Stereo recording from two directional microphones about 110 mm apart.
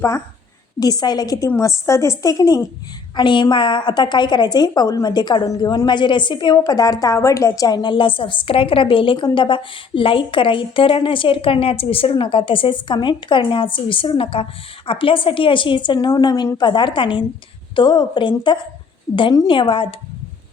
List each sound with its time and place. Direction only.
0.8 s a woman's voice: 35° left (ahead or behind); by 20.0 s 50° left (ahead or behind)